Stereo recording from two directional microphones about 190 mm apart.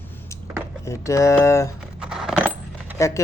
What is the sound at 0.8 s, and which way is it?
Speech, 15° left (ahead or behind).